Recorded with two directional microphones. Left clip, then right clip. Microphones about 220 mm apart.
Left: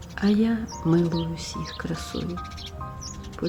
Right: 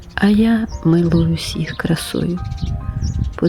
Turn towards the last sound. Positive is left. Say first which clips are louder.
# right 11 dB
turn(degrees=-40)  # may be behind; listen again after turning